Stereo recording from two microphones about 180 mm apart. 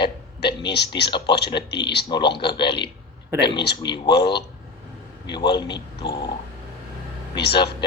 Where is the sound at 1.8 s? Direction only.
70° left (ahead or behind).